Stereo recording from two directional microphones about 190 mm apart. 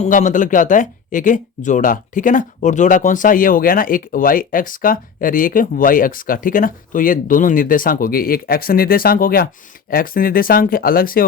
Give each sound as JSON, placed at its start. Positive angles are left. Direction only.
{"t": 0.0, "sound": "speech", "side_deg": 40}